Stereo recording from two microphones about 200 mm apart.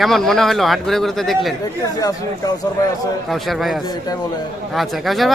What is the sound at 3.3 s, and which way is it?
A man's voice, centre (ahead or behind).